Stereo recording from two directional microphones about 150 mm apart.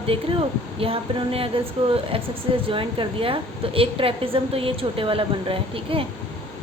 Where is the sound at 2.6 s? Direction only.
35° right (ahead or behind).